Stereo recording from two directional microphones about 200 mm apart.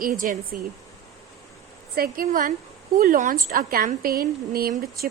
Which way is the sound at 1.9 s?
45° right (ahead or behind).